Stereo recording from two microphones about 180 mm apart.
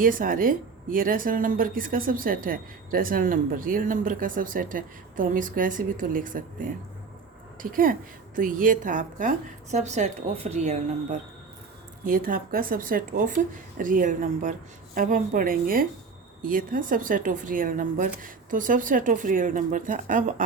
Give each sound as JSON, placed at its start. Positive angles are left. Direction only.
{"t": 0.0, "sound": "a woman's voice", "side_deg": -50}
{"t": 12.0, "sound": "speech", "side_deg": -50}